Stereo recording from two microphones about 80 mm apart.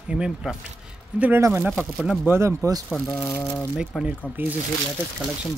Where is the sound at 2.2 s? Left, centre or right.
Right.